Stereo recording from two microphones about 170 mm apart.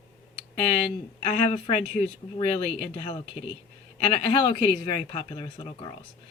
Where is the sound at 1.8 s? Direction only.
60° right (ahead or behind).